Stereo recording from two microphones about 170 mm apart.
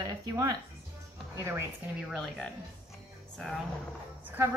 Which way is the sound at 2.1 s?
Centre (ahead or behind).